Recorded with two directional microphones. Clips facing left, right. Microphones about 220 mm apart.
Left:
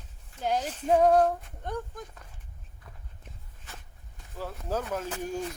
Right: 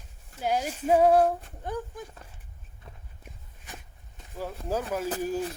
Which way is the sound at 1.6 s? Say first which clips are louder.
Right 1 dB; 5° right (ahead or behind).